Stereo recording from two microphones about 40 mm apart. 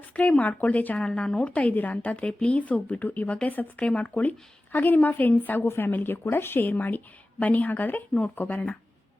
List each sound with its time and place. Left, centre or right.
0.1 s a woman's voice: left
0.9 s a woman's voice: left
3.8 s a woman's voice: left
4.0 s a woman's voice: left
6.3 s a woman's voice: left
7.3 s a woman's voice: left